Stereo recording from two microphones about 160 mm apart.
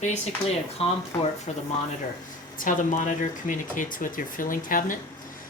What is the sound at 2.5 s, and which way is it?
Speech, 55° left (ahead or behind).